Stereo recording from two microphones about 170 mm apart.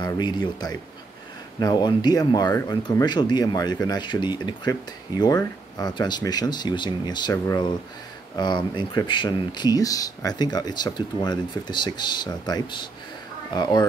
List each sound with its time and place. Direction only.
0.0 s speech: 25° left (ahead or behind)